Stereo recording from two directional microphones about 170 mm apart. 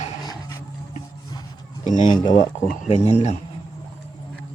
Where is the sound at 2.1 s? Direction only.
25° left (ahead or behind).